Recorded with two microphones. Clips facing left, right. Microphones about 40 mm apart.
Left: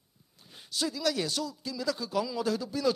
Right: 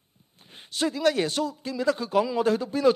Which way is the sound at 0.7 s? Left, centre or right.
Right.